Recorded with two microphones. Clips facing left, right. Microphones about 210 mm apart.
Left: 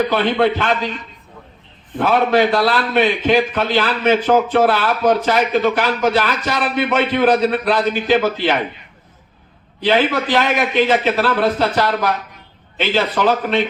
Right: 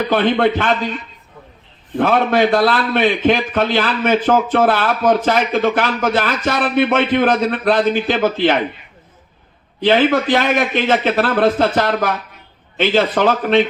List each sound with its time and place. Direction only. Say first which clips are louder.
0.1 s a man's voice: right 1 dB; 50° right (ahead or behind)
2.0 s a man's voice: even; 50° right (ahead or behind)
9.8 s a man's voice: right 3 dB; 50° right (ahead or behind)